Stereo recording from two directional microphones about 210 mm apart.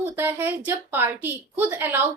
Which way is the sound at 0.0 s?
10° right (ahead or behind).